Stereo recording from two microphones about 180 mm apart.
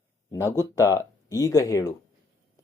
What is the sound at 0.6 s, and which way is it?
Speech, 15° left (ahead or behind).